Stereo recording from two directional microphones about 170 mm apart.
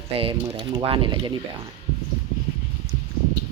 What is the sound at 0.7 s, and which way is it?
Speech, 30° right (ahead or behind).